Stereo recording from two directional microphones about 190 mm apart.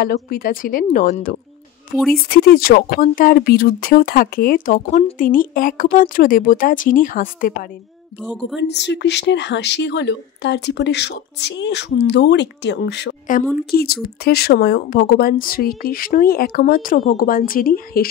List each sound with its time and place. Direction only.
0.0 s speech: 55° left (ahead or behind)
2.1 s speech: 55° left (ahead or behind)
8.5 s speech: 65° left (ahead or behind); by 18.0 s 50° left (ahead or behind)